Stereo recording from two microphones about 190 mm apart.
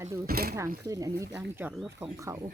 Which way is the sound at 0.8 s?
20° right (ahead or behind).